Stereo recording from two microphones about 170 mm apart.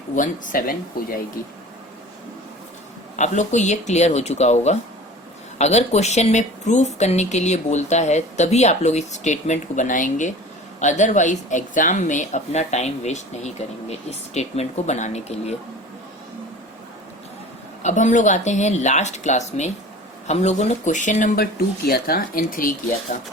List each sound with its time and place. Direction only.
0.2 s speech: 50° left (ahead or behind)
3.2 s speech: 45° left (ahead or behind)
17.8 s speech: 45° left (ahead or behind)
21.8 s speech: 60° left (ahead or behind); by 23.2 s 45° left (ahead or behind)